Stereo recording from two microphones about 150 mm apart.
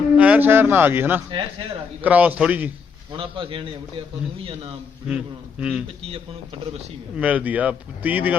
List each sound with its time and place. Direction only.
0.2 s speech: 10° right (ahead or behind)
1.3 s a man's voice: 35° right (ahead or behind)
2.0 s speech: 10° right (ahead or behind)
3.1 s a man's voice: 35° right (ahead or behind)
5.0 s a man's voice: 5° right (ahead or behind)
6.0 s a man's voice: 40° right (ahead or behind)
7.2 s speech: 10° right (ahead or behind)